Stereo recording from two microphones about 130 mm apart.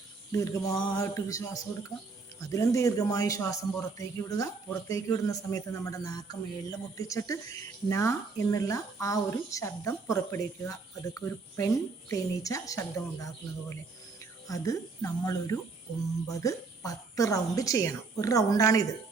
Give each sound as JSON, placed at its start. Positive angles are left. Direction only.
{"t": 0.3, "sound": "speech", "side_deg": 25}
{"t": 0.8, "sound": "mantra", "side_deg": 35}
{"t": 1.0, "sound": "speech", "side_deg": 25}
{"t": 14.4, "sound": "speech", "side_deg": 25}